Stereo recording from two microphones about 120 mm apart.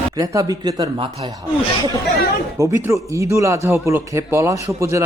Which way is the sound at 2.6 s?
25° right (ahead or behind).